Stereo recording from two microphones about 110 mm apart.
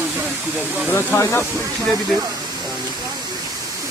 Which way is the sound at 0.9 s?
20° left (ahead or behind).